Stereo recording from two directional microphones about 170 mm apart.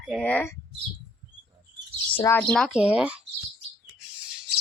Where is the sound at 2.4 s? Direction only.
5° left (ahead or behind).